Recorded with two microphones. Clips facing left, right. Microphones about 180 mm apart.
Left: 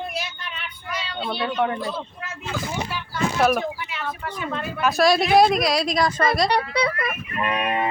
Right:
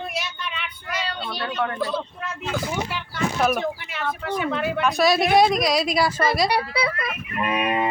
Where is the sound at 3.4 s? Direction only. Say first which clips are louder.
Left 2 dB; centre (ahead or behind).